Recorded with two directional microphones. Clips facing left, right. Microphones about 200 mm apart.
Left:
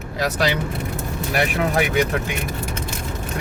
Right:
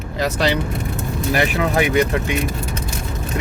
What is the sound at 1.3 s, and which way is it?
Speech, centre (ahead or behind).